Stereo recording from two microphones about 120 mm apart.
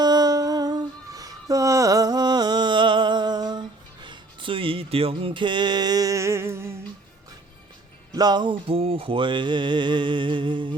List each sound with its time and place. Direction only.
0.0 s humming: 35° right (ahead or behind)
8.1 s music: 35° right (ahead or behind)